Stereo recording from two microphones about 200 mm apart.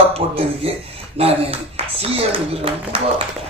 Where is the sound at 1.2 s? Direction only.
30° right (ahead or behind).